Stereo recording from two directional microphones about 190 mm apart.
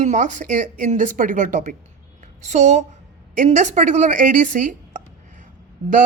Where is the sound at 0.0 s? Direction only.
40° right (ahead or behind).